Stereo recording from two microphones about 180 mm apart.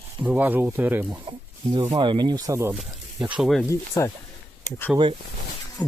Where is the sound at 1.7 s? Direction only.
25° right (ahead or behind).